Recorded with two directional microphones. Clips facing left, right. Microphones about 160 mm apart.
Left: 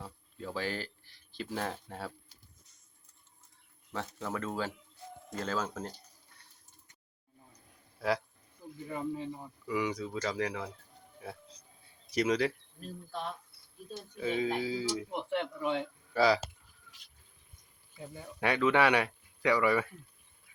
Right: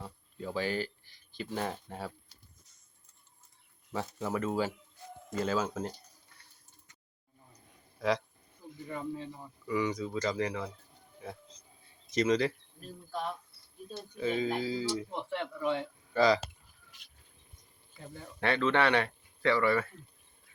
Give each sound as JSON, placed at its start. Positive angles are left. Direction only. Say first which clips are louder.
{"t": 0.0, "sound": "speech", "louder": "right 2 dB", "side_deg": 0}
{"t": 3.9, "sound": "speech", "louder": "right 3 dB", "side_deg": -10}
{"t": 7.7, "sound": "a sound", "louder": "right 1 dB", "side_deg": 5}
{"t": 8.9, "sound": "speech", "louder": "left 2 dB", "side_deg": 15}
{"t": 12.1, "sound": "speech", "louder": "right 1 dB", "side_deg": 5}
{"t": 14.2, "sound": "speech", "louder": "right 1 dB", "side_deg": 5}
{"t": 15.1, "sound": "speech", "louder": "left 2 dB", "side_deg": 15}
{"t": 16.1, "sound": "speech", "louder": "right 1 dB", "side_deg": 5}
{"t": 18.1, "sound": "speech", "louder": "even", "side_deg": 10}